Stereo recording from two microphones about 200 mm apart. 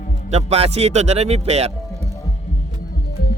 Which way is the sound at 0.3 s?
30° right (ahead or behind).